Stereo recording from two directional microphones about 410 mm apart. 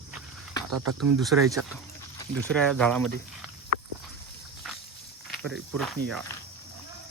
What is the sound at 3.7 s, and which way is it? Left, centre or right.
Walk, right.